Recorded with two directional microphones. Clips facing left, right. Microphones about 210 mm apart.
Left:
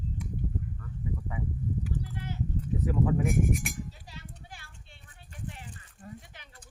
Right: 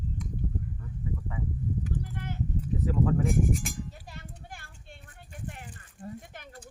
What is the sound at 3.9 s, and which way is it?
Clip-clop, 55° right (ahead or behind).